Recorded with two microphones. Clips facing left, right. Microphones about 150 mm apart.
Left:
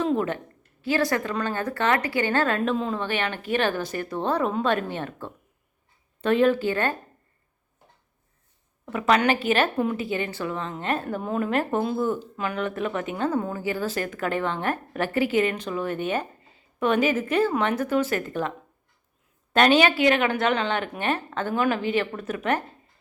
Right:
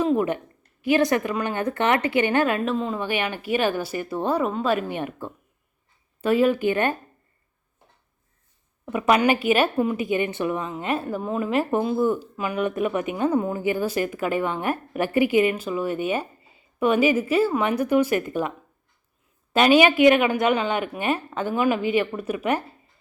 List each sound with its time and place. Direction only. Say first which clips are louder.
0.0 s a woman's voice: right 3 dB; 10° right (ahead or behind)
2.6 s speech: right 1 dB; centre (ahead or behind)
8.9 s speech: right 2 dB; 15° right (ahead or behind)
19.5 s speech: right 2 dB; 10° right (ahead or behind)